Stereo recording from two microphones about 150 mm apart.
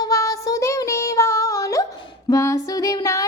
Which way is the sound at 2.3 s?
20° left (ahead or behind).